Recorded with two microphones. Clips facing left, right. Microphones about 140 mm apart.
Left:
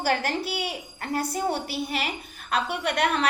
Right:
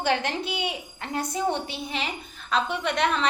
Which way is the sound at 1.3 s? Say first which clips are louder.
Even; 5° left (ahead or behind).